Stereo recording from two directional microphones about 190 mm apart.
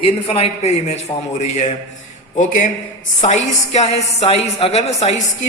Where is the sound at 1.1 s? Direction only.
15° left (ahead or behind).